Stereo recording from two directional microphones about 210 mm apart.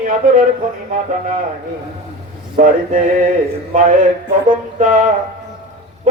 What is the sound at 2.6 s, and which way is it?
Speech, 40° right (ahead or behind).